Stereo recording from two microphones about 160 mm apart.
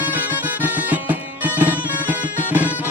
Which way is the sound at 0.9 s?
10° right (ahead or behind).